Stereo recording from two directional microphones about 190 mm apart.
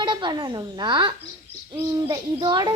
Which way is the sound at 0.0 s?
25° right (ahead or behind).